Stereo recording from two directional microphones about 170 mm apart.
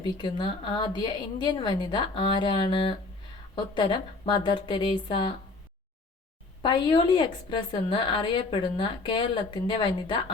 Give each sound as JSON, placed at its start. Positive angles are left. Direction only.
{"t": 0.0, "sound": "a woman's voice", "side_deg": 25}
{"t": 6.6, "sound": "a woman's voice", "side_deg": 30}